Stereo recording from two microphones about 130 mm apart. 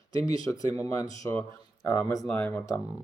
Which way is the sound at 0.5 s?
25° left (ahead or behind).